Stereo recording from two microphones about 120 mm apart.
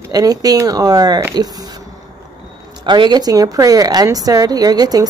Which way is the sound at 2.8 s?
40° right (ahead or behind).